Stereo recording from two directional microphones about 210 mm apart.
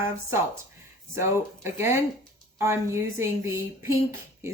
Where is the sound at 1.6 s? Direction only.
10° right (ahead or behind).